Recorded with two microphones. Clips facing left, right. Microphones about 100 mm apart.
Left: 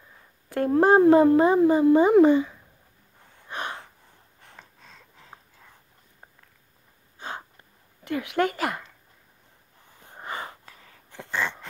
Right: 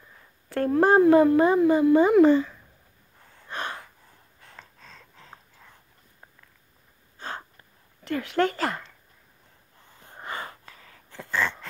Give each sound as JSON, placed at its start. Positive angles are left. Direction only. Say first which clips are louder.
{"t": 0.5, "sound": "speech", "louder": "left 1 dB", "side_deg": 20}
{"t": 3.4, "sound": "gasp", "louder": "even", "side_deg": 20}
{"t": 4.5, "sound": "a sound", "louder": "right 2 dB", "side_deg": 15}
{"t": 7.2, "sound": "gasp", "louder": "even", "side_deg": 15}
{"t": 8.0, "sound": "speech", "louder": "even", "side_deg": 15}
{"t": 10.0, "sound": "a sound", "louder": "left 1 dB", "side_deg": 20}